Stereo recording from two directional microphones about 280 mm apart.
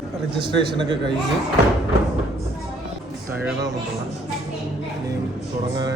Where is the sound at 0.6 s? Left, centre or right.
Centre.